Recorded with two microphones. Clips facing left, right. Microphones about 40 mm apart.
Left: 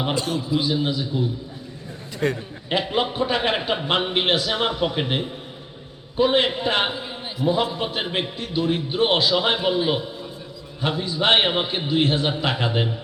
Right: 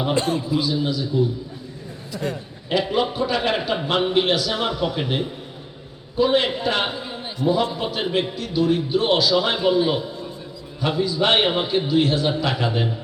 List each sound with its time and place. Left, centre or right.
0.1 s a man's voice: right
0.4 s a man's voice: left
2.1 s a man's voice: left
2.9 s a man's voice: left
6.9 s a sound: centre
8.1 s a man's voice: left
11.0 s a man's voice: left